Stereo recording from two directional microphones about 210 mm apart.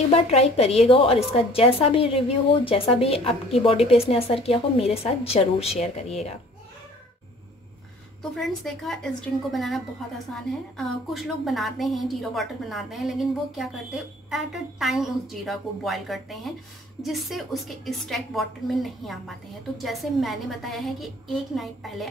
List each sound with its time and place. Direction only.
0.1 s a woman's voice: 30° left (ahead or behind)
8.2 s a woman's voice: centre (ahead or behind)